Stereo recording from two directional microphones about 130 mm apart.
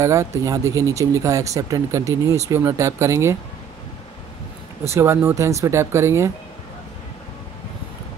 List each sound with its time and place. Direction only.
0.0 s speech: 25° right (ahead or behind)
4.9 s speech: 20° right (ahead or behind)